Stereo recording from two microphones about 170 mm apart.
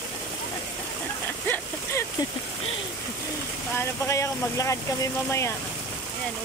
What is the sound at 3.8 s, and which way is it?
Speech, 15° left (ahead or behind).